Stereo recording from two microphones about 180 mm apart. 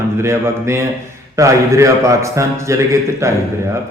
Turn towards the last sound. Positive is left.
turn(degrees=-15)  # may be behind; listen again after turning